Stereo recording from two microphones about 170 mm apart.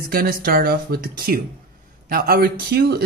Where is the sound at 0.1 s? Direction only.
60° right (ahead or behind).